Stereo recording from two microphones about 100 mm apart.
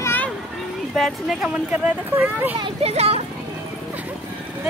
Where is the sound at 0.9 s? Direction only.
Centre (ahead or behind).